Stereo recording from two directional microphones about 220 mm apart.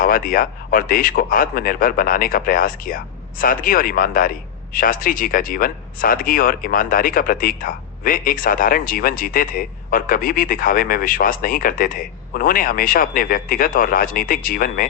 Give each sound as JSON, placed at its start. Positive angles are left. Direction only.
{"t": 0.0, "sound": "a man's voice", "side_deg": 40}